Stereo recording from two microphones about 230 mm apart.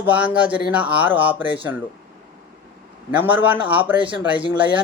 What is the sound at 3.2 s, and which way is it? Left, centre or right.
Speech, centre.